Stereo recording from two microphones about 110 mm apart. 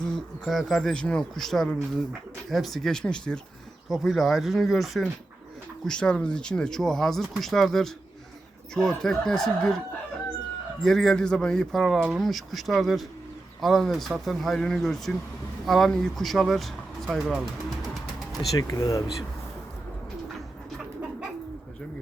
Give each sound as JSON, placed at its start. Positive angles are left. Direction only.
{"t": 0.0, "sound": "speech", "side_deg": 5}
{"t": 10.8, "sound": "speech", "side_deg": 5}
{"t": 18.5, "sound": "speech", "side_deg": 30}